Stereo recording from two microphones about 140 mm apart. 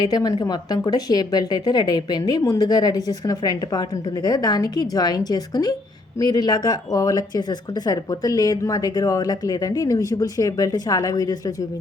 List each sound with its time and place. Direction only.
0.0 s speech: 25° left (ahead or behind)